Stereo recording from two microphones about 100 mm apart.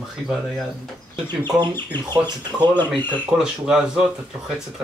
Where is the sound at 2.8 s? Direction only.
20° left (ahead or behind).